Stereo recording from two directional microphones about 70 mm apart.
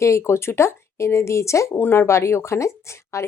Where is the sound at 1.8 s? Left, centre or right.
Left.